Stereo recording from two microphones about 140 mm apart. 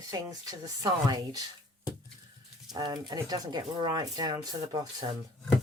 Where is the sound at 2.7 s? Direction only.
30° right (ahead or behind).